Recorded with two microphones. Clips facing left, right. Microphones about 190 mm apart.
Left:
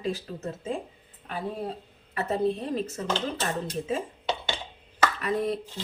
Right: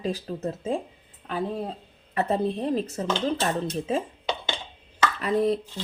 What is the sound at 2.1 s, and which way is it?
Speech, 35° right (ahead or behind).